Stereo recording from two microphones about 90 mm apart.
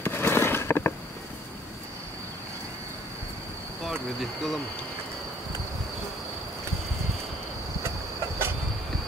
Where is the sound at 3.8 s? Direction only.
Centre (ahead or behind).